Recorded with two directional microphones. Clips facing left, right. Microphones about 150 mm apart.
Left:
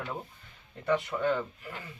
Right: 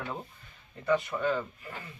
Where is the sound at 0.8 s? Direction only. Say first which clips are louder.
Right 1 dB; 20° left (ahead or behind).